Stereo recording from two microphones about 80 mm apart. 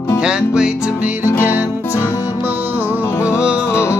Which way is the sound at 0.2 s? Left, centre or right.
Centre.